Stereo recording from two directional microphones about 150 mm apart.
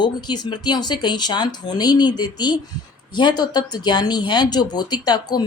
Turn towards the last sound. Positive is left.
turn(degrees=25)  # may be behind; listen again after turning